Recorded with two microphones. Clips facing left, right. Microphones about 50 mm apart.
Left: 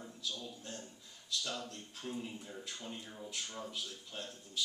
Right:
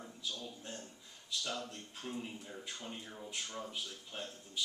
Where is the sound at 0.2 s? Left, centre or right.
Centre.